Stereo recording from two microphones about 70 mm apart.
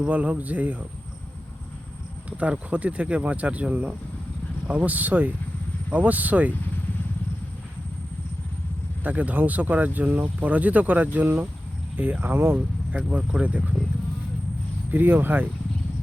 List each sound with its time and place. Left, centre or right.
0.0 s speech: centre
2.4 s speech: centre
9.0 s speech: right
12.5 s speech: centre
14.8 s speech: right